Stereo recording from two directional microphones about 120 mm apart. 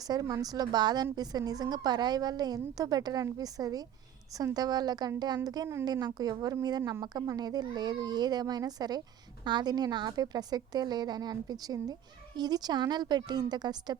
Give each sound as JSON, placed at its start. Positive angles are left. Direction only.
{"t": 0.0, "sound": "a woman's voice", "side_deg": -30}